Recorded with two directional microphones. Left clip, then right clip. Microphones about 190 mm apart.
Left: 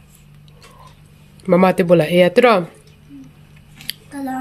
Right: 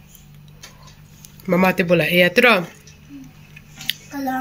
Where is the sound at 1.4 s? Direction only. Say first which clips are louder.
Left 4 dB; 25° left (ahead or behind).